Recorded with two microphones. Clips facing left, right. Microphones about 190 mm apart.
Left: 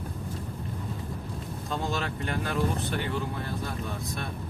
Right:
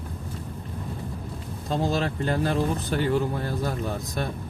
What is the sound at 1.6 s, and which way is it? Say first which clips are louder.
Speech: right 6 dB; 35° right (ahead or behind).